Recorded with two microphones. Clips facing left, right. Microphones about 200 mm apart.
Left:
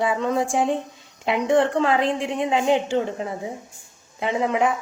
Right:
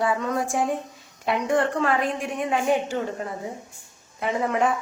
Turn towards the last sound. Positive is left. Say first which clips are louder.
# left 2 dB
turn(degrees=15)  # may be behind; listen again after turning